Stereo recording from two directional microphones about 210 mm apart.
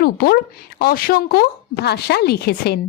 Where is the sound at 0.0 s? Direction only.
50° left (ahead or behind).